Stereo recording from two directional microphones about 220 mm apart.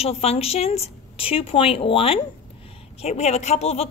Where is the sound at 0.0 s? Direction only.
30° left (ahead or behind).